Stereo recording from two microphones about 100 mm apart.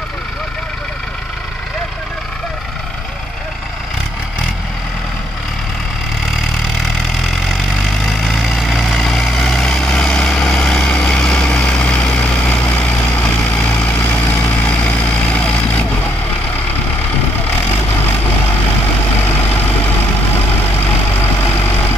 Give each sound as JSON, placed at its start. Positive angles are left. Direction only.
{"t": 7.2, "sound": "vehicle", "side_deg": -5}
{"t": 14.0, "sound": "vehicle", "side_deg": 20}
{"t": 19.2, "sound": "vehicle", "side_deg": 20}
{"t": 20.8, "sound": "vehicle", "side_deg": 25}